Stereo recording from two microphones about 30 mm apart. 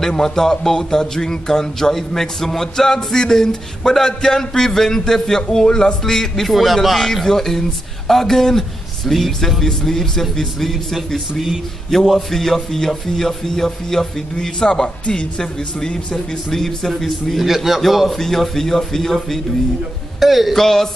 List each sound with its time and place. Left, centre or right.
0.2 s speech: centre
6.5 s a man's voice: centre
10.6 s a man's voice: centre
12.1 s a man's voice: centre; by 16.0 s left
16.4 s speech: centre
17.4 s a man's voice: centre
20.2 s speech: centre
20.5 s speech: centre